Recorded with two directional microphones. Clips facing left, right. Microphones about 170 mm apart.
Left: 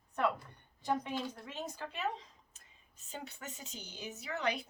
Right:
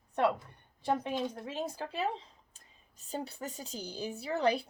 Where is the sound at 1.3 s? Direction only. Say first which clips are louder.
Right 6 dB; 30° right (ahead or behind).